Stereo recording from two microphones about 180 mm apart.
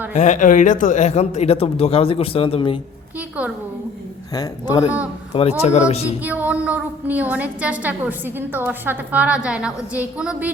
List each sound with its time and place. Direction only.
0.1 s speech: 40° left (ahead or behind)
3.2 s a woman's voice: 5° right (ahead or behind)
4.4 s speech: 20° left (ahead or behind)
5.3 s speech: 35° left (ahead or behind)
6.2 s a woman's voice: 10° right (ahead or behind)